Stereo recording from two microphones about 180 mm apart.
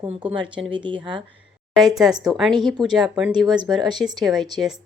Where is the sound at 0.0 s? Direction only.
30° right (ahead or behind).